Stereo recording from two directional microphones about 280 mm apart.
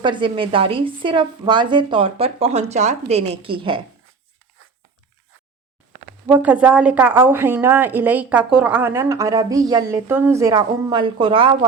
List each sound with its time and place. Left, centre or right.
0.0 s speech: centre
6.2 s a woman's voice: centre